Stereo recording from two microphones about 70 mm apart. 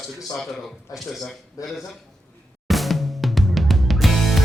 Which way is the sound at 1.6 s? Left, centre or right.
Left.